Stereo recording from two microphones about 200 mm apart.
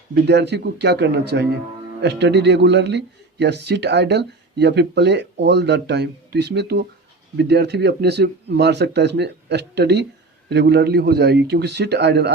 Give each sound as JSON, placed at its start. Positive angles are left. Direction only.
{"t": 0.1, "sound": "speech", "side_deg": -55}